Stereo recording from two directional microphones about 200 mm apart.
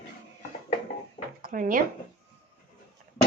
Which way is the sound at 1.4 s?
45° right (ahead or behind).